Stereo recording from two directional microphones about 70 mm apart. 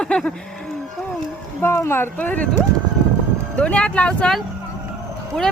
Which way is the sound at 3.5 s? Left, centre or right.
Centre.